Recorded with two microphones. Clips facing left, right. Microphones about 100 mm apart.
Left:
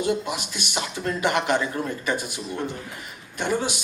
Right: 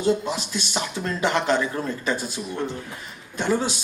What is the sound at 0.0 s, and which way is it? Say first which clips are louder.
Speech: right 2 dB; 15° left (ahead or behind).